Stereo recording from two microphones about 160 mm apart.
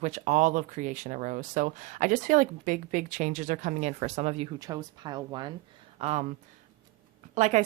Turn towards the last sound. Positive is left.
turn(degrees=-45)  # may be behind; listen again after turning